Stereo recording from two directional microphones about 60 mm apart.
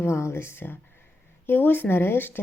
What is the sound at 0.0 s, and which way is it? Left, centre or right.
A woman's voice, left.